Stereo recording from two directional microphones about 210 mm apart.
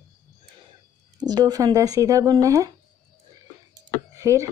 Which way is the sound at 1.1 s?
20° right (ahead or behind).